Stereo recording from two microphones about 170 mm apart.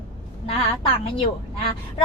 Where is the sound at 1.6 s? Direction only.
35° left (ahead or behind).